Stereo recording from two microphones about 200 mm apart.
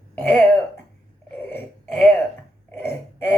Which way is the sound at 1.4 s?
5° left (ahead or behind).